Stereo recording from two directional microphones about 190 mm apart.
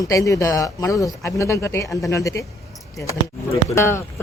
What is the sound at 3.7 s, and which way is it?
Speech, 15° left (ahead or behind).